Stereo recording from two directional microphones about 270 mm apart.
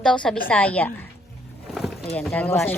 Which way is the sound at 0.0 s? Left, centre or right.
Centre.